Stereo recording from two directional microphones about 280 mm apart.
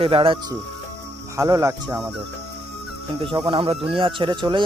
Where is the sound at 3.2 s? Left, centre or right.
Centre.